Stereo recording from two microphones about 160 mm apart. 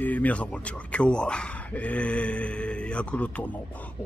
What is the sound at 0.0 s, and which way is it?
Speech, 10° left (ahead or behind).